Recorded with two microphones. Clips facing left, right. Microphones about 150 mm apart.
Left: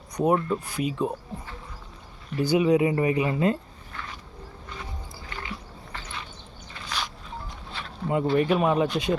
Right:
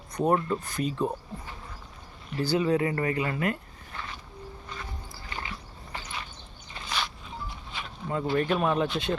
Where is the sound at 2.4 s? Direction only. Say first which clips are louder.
Left 4 dB; 15° left (ahead or behind).